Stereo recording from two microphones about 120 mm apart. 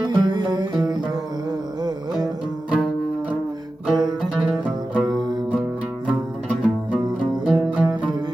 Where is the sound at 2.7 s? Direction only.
10° right (ahead or behind).